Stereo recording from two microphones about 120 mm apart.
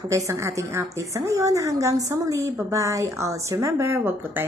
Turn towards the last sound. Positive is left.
turn(degrees=-20)  # may be behind; listen again after turning